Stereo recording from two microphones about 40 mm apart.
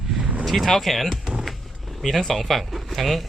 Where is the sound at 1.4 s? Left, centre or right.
Centre.